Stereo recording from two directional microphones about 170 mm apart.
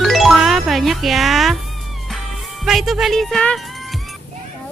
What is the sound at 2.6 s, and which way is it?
Speech, centre (ahead or behind).